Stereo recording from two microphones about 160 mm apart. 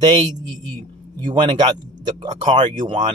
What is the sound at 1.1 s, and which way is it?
Speech, 30° right (ahead or behind).